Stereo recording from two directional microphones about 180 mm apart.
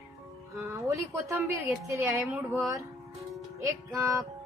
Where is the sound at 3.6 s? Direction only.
15° right (ahead or behind).